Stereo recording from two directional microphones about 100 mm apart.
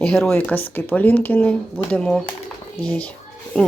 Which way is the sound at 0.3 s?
15° left (ahead or behind).